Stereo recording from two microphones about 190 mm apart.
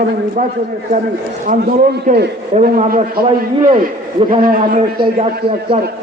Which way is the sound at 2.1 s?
40° right (ahead or behind).